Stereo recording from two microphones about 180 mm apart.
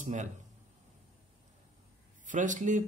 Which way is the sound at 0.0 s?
45° right (ahead or behind).